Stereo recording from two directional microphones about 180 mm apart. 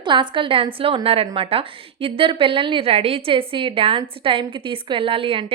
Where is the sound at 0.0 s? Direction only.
25° right (ahead or behind).